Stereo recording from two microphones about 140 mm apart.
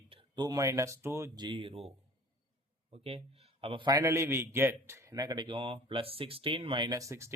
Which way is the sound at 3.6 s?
40° right (ahead or behind).